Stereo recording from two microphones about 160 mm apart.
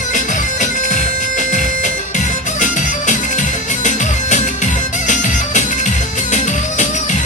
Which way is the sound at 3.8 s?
50° left (ahead or behind).